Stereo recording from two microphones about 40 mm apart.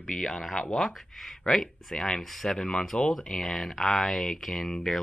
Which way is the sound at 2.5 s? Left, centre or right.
Centre.